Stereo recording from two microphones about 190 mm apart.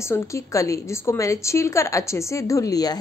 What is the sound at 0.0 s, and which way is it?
Speech, 15° left (ahead or behind).